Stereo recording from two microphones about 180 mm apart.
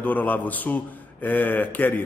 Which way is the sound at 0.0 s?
10° left (ahead or behind).